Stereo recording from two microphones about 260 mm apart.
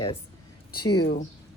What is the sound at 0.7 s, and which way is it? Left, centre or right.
Speech, left.